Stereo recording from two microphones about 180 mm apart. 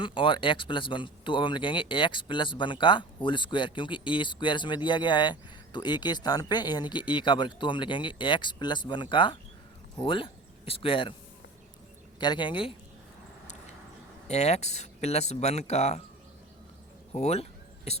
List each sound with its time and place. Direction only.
0.0 s speech: 30° left (ahead or behind)
12.2 s speech: 25° left (ahead or behind)
14.3 s speech: 35° left (ahead or behind)
17.2 s a sound: 35° left (ahead or behind)